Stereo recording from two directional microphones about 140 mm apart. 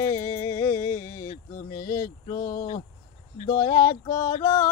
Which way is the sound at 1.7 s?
20° left (ahead or behind).